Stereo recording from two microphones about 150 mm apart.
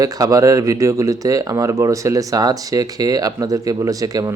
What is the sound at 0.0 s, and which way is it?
Speech, 25° right (ahead or behind).